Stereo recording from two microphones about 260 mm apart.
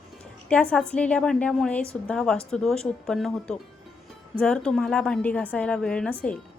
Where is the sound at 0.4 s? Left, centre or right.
Centre.